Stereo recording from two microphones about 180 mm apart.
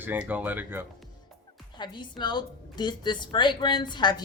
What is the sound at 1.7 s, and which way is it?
Speech, 25° left (ahead or behind).